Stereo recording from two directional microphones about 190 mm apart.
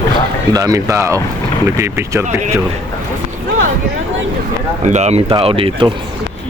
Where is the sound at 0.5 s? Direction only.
15° right (ahead or behind).